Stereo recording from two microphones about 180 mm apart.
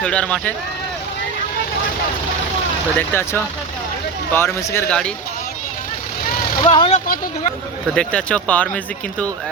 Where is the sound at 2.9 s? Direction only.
15° left (ahead or behind).